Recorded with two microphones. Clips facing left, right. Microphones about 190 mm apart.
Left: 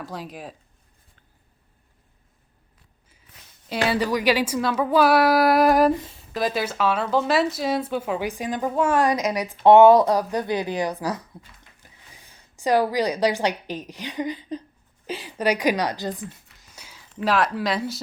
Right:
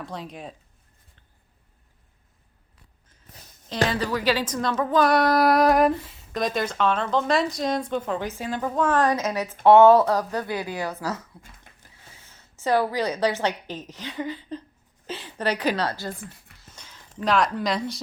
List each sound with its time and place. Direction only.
0.0 s speech: centre (ahead or behind)
3.8 s a woman's voice: 10° left (ahead or behind)
16.6 s a sound: 10° left (ahead or behind)
17.2 s speech: 5° left (ahead or behind)